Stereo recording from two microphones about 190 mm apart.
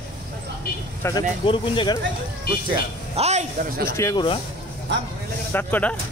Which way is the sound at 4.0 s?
15° left (ahead or behind).